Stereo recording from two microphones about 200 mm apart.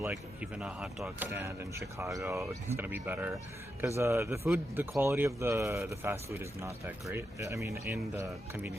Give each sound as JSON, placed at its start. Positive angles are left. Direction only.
{"t": 0.0, "sound": "speech", "side_deg": -5}